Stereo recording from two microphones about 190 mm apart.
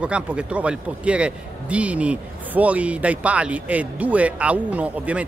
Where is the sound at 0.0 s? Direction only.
5° right (ahead or behind).